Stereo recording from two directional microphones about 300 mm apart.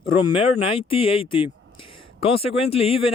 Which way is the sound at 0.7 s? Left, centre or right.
Centre.